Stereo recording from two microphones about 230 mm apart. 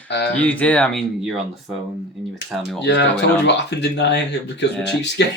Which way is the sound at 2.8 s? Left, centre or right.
Left.